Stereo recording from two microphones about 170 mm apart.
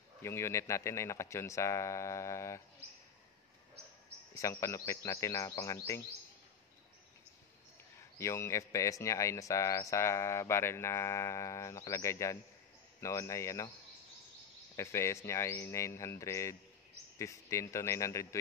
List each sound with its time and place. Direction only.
0.2 s speech: 15° left (ahead or behind)
4.3 s speech: 20° left (ahead or behind)
8.2 s speech: 15° left (ahead or behind)
14.8 s speech: 15° left (ahead or behind)